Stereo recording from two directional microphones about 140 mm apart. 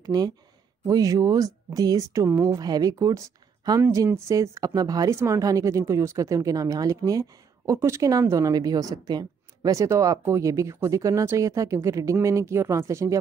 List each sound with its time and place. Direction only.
0.0 s speech: 30° right (ahead or behind)